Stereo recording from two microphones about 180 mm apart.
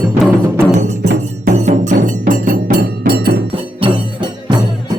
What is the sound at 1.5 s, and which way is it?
Music, 45° right (ahead or behind).